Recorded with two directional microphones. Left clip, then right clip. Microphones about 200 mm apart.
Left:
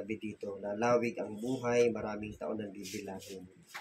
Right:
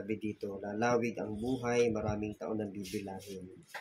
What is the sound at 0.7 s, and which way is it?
Speech, 35° right (ahead or behind).